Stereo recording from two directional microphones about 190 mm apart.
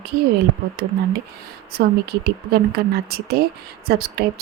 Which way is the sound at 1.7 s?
55° right (ahead or behind).